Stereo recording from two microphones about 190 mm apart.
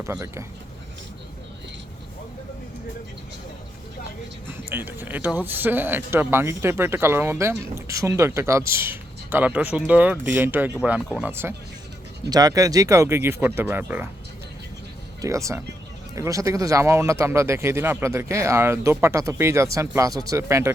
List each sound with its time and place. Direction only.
0.0 s speech: 15° right (ahead or behind)
4.7 s speech: 10° right (ahead or behind)
15.2 s speech: 15° right (ahead or behind)